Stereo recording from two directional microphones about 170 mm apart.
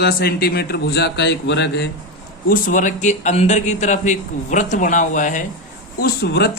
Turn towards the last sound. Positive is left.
turn(degrees=70)  # may be behind; listen again after turning